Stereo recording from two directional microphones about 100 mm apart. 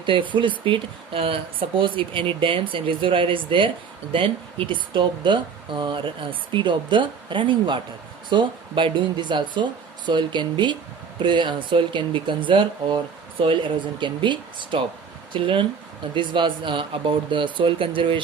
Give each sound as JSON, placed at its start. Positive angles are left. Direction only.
{"t": 0.0, "sound": "speech", "side_deg": -55}